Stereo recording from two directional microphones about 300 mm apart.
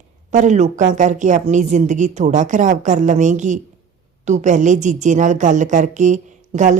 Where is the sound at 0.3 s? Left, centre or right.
Right.